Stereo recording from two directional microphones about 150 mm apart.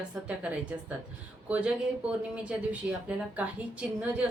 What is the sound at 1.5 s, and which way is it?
A woman's voice, 10° right (ahead or behind).